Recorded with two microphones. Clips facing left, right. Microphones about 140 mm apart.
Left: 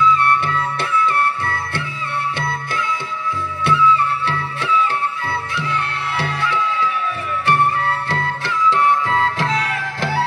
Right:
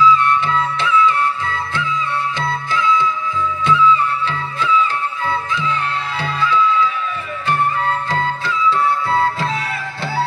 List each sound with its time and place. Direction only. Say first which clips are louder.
0.0 s music: right 2 dB; 55° left (ahead or behind); by 6.9 s 75° left (ahead or behind)
9.4 s music: left 1 dB; 90° left